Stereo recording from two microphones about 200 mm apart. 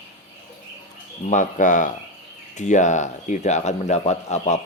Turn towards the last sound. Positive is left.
turn(degrees=35)  # may be behind; listen again after turning